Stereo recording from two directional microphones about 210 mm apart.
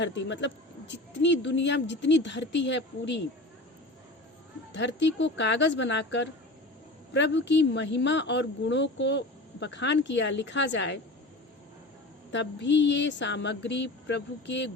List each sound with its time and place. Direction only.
0.0 s speech: 60° left (ahead or behind)
4.7 s speech: 55° left (ahead or behind)
12.3 s speech: 55° left (ahead or behind)